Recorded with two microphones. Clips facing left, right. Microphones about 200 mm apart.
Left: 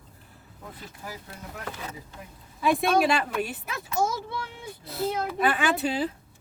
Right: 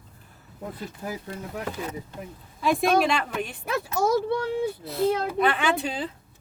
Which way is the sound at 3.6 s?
60° right (ahead or behind).